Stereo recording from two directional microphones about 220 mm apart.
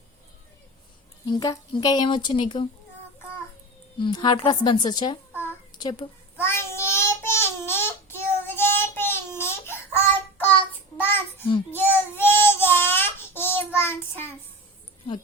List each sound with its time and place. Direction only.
1.3 s speech: 15° left (ahead or behind)
3.9 s speech: 20° left (ahead or behind)
5.4 s a sound: 15° left (ahead or behind)
6.4 s child singing: 10° left (ahead or behind)